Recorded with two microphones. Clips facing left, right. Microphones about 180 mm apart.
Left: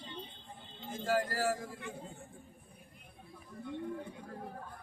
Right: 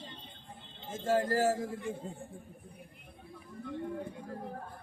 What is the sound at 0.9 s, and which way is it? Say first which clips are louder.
Speech: right 4 dB; 25° right (ahead or behind).